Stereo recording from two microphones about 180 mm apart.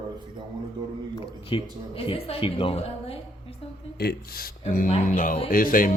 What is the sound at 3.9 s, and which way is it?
Speech, 60° left (ahead or behind).